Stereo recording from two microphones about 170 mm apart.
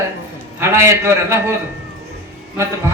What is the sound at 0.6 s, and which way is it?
Speech, 15° right (ahead or behind).